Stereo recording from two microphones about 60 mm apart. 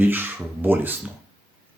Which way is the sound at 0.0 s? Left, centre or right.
Right.